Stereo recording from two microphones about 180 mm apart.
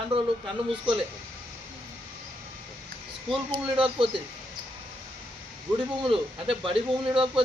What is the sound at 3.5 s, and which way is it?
Speech, 30° right (ahead or behind).